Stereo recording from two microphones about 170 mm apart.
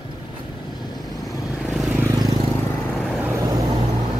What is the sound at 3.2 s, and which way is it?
Vehicle, 20° right (ahead or behind).